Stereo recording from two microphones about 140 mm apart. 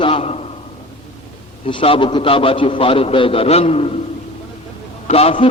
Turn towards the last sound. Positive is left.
turn(degrees=40)  # may be behind; listen again after turning